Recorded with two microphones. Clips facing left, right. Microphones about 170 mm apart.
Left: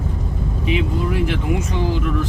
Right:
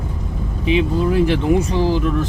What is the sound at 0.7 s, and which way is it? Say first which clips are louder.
Speech: right 5 dB; 30° right (ahead or behind).